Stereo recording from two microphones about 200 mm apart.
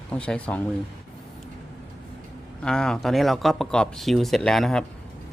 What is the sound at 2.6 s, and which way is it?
Speech, 5° left (ahead or behind).